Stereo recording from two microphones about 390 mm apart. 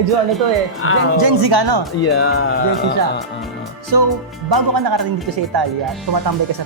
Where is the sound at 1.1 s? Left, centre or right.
Right.